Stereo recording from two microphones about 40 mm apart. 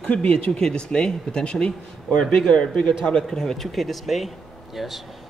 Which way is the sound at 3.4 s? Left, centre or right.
Centre.